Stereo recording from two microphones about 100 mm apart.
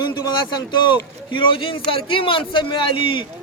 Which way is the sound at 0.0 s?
50° left (ahead or behind).